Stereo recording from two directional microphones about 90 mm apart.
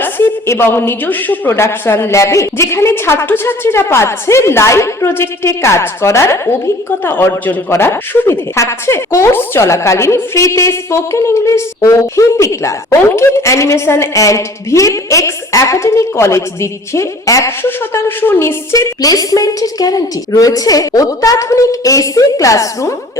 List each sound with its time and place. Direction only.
0.0 s a woman's voice: 25° left (ahead or behind)
17.6 s a woman's voice: 25° left (ahead or behind)
19.0 s a man's voice: 40° left (ahead or behind)